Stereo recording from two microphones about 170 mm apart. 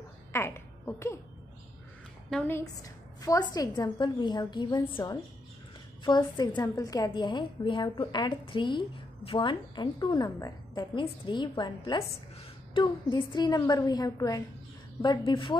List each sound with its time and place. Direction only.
0.3 s speech: 15° left (ahead or behind)
2.2 s a woman's voice: 5° left (ahead or behind)
2.5 s a woman's voice: 20° left (ahead or behind)